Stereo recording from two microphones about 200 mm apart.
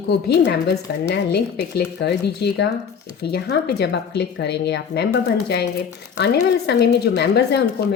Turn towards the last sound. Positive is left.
turn(degrees=55)  # may be behind; listen again after turning